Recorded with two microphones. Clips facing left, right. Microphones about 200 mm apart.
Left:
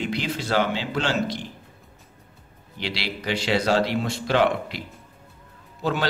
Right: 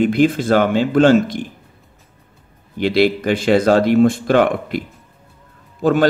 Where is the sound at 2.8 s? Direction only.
50° right (ahead or behind).